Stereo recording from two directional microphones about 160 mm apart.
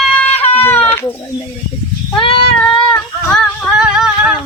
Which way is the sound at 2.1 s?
30° left (ahead or behind).